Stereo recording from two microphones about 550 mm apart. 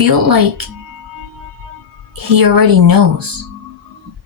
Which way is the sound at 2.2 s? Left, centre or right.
Right.